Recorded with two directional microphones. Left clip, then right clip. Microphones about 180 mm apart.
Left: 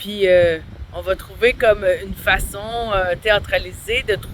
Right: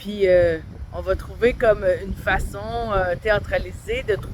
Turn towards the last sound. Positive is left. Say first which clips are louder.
# left 4 dB
turn(degrees=20)  # may be behind; listen again after turning